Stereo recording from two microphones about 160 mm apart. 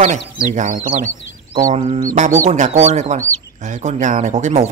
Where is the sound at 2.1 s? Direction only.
50° right (ahead or behind).